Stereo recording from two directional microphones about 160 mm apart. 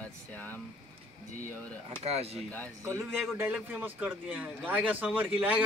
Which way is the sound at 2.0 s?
40° right (ahead or behind).